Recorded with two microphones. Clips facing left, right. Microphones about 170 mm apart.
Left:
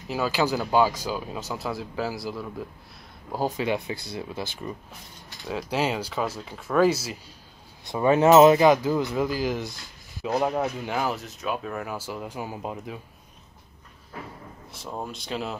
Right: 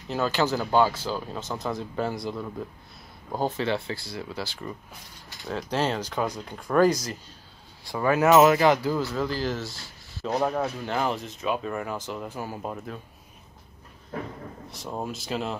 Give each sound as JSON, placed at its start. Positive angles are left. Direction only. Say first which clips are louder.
{"t": 0.1, "sound": "speech", "louder": "even", "side_deg": 10}
{"t": 5.3, "sound": "speech", "louder": "even", "side_deg": 5}
{"t": 7.8, "sound": "speech", "louder": "left 3 dB", "side_deg": 20}
{"t": 14.7, "sound": "speech", "louder": "right 1 dB", "side_deg": 0}